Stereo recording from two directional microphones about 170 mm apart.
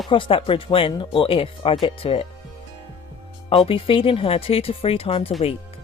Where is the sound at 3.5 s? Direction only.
30° left (ahead or behind).